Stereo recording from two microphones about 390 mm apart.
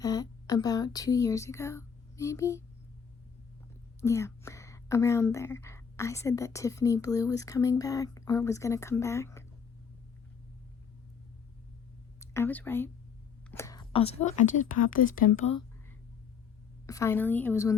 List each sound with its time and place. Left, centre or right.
0.0 s speech: centre
4.0 s a woman's voice: centre
12.2 s speech: centre
13.5 s a sound: centre
14.7 s speech: centre
16.8 s a woman's voice: centre